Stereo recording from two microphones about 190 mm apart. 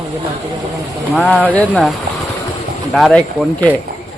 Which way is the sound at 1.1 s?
5° left (ahead or behind).